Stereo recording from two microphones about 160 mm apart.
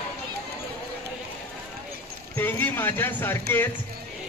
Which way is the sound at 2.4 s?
10° left (ahead or behind).